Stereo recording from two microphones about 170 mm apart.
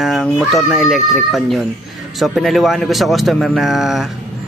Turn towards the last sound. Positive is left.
turn(degrees=0)  # may be behind; listen again after turning